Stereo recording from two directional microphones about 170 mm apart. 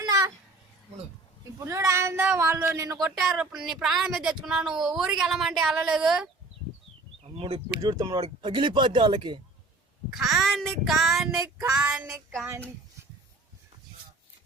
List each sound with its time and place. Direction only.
0.0 s a sound: 20° right (ahead or behind)
1.5 s speech: 20° right (ahead or behind)
3.3 s speech: 5° right (ahead or behind)
7.3 s speech: 35° right (ahead or behind)
7.8 s speech: 20° right (ahead or behind)
10.2 s speech: centre (ahead or behind)